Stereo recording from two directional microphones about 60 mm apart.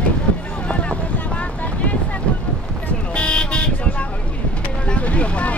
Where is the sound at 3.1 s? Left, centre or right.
Centre.